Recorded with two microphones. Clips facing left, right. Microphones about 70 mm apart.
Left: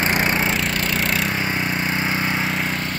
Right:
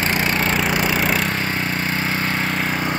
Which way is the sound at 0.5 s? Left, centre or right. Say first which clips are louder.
Right 3 dB; centre.